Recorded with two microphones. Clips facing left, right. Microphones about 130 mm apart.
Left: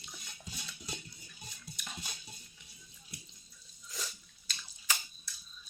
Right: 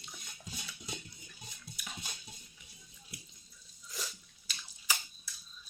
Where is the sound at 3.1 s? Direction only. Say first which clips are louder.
Even; 5° right (ahead or behind).